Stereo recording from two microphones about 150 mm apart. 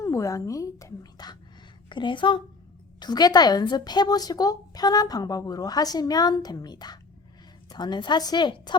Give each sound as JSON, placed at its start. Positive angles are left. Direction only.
{"t": 0.0, "sound": "a woman's voice", "side_deg": 20}